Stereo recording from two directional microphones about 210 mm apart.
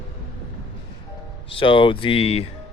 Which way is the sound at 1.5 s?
25° left (ahead or behind).